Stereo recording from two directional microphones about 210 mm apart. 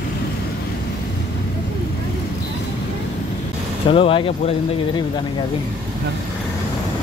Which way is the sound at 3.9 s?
25° left (ahead or behind).